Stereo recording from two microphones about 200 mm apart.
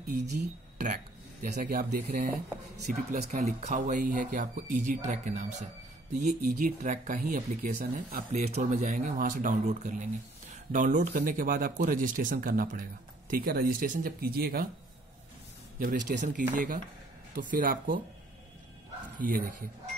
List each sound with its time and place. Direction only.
0.4 s speech: 45° right (ahead or behind)
15.8 s speech: 45° right (ahead or behind)
19.1 s speech: 45° right (ahead or behind)